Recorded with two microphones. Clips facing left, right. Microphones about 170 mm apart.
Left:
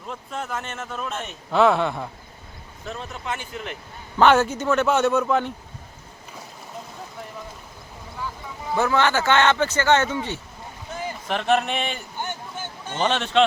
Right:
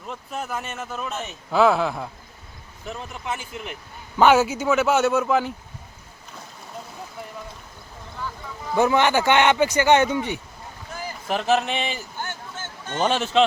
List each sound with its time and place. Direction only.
0.1 s speech: 5° right (ahead or behind)
8.7 s speech: 15° right (ahead or behind)
11.3 s speech: 5° right (ahead or behind)
12.2 s a sound: 15° left (ahead or behind)
13.0 s speech: 5° right (ahead or behind)